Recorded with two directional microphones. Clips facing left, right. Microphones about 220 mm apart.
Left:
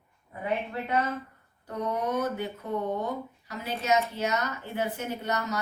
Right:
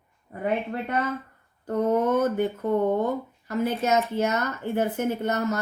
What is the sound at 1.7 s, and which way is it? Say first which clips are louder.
Speech: right 8 dB; 50° right (ahead or behind).